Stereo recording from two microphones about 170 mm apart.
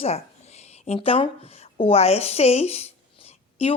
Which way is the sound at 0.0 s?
40° left (ahead or behind).